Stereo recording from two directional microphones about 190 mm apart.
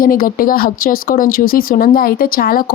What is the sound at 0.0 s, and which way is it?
Speech, 50° left (ahead or behind).